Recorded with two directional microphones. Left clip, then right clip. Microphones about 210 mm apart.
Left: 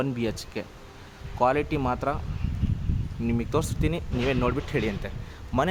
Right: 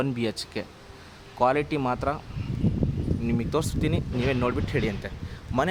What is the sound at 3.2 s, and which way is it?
Speech, centre (ahead or behind).